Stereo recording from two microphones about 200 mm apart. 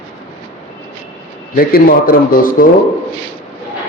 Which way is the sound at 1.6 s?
45° left (ahead or behind).